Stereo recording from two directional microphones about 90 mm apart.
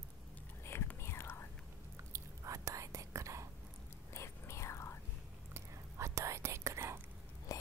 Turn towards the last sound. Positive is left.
turn(degrees=40)  # may be behind; listen again after turning